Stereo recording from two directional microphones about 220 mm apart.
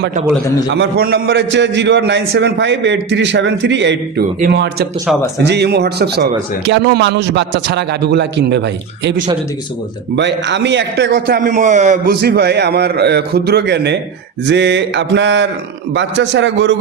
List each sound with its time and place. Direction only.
0.7 s a man's voice: 50° right (ahead or behind)